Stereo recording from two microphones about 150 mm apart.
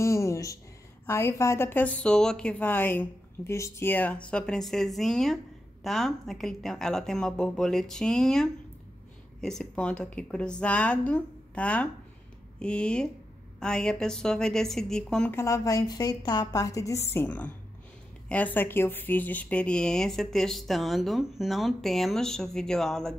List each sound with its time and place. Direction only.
0.0 s a sound: 20° left (ahead or behind)
1.0 s a woman's voice: 15° left (ahead or behind)
15.3 s a woman's voice: 20° left (ahead or behind); by 23.1 s 5° left (ahead or behind)